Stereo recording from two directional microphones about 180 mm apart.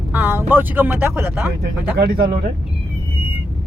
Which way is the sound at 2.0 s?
60° right (ahead or behind).